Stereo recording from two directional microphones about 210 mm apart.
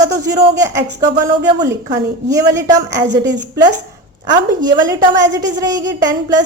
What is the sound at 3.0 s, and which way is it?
Speech, 55° right (ahead or behind).